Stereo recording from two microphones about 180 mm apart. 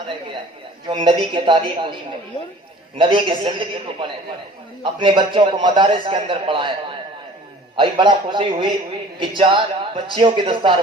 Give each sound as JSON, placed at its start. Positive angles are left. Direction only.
{"t": 0.9, "sound": "a man's voice", "side_deg": -25}
{"t": 3.0, "sound": "a man's voice", "side_deg": -25}
{"t": 4.8, "sound": "a man's voice", "side_deg": -25}